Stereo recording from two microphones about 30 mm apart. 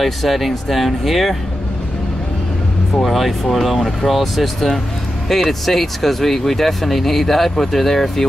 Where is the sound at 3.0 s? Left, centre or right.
Centre.